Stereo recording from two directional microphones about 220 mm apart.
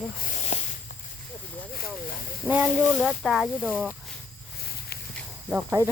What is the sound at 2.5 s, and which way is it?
Speech, 10° right (ahead or behind).